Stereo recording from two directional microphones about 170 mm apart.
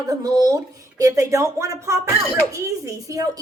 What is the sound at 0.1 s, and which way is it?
Speech, 20° right (ahead or behind).